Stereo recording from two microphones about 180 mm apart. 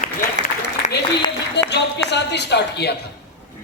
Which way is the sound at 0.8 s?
40° left (ahead or behind).